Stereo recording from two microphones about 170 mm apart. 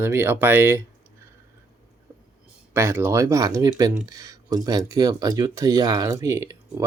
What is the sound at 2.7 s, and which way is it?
Speech, 15° right (ahead or behind).